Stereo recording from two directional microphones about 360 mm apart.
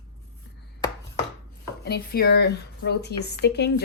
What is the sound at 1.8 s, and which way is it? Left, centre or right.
Speech, left.